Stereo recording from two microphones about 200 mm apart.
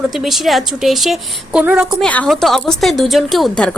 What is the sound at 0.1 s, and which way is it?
A woman's voice, centre (ahead or behind).